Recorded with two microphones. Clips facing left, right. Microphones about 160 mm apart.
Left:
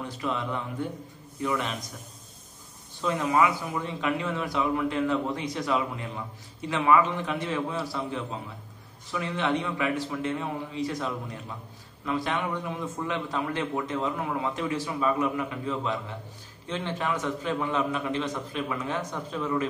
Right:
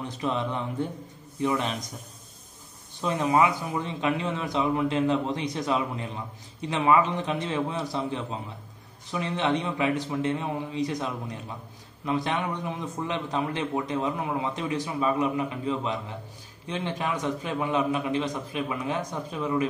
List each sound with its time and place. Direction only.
0.2 s a man's voice: 25° right (ahead or behind)
3.0 s a man's voice: 20° right (ahead or behind)